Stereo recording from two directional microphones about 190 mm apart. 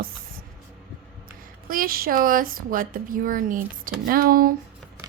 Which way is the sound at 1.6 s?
50° right (ahead or behind).